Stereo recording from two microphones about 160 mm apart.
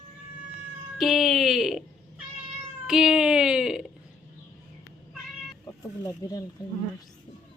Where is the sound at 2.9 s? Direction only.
5° right (ahead or behind).